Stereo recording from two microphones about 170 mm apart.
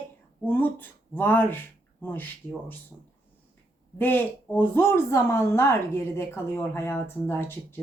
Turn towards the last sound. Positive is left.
turn(degrees=15)  # may be behind; listen again after turning